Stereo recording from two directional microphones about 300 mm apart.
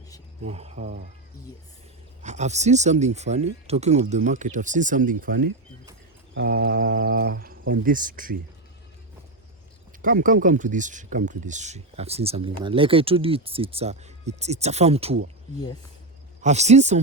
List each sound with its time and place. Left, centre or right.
0.4 s speech: right
2.2 s speech: right
10.0 s speech: right
16.4 s speech: right